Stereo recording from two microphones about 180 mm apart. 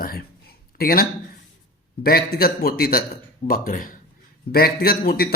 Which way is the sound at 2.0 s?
60° left (ahead or behind).